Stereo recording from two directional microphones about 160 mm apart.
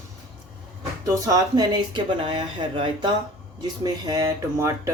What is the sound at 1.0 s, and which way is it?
Speech, 20° right (ahead or behind).